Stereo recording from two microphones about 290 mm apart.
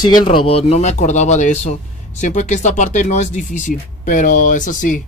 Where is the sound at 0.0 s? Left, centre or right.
Centre.